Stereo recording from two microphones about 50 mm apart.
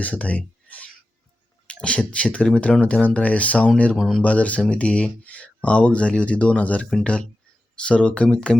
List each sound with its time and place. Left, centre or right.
0.0 s speech: left
3.9 s speech: centre
4.2 s speech: left